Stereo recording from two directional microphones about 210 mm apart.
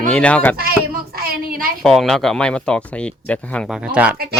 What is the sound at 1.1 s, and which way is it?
Speech, 45° right (ahead or behind).